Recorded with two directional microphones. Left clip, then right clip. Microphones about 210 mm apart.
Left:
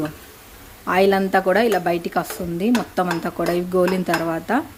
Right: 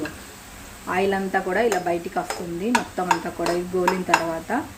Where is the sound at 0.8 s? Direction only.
45° left (ahead or behind).